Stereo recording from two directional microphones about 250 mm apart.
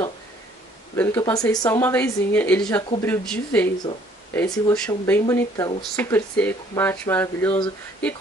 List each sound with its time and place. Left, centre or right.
0.9 s speech: centre